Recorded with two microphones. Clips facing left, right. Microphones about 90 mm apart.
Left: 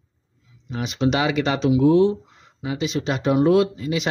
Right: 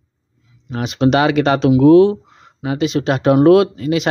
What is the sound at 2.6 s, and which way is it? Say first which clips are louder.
Speech: right 7 dB; 65° right (ahead or behind).